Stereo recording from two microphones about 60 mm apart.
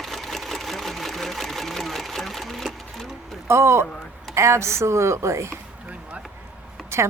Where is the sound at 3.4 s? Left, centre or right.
Right.